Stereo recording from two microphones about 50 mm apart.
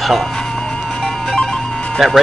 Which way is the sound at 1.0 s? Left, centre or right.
Centre.